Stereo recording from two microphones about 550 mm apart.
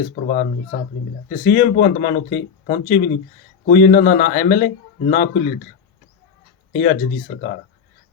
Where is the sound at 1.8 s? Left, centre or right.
Centre.